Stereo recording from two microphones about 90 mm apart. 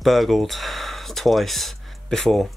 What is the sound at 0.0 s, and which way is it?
Speech, centre (ahead or behind).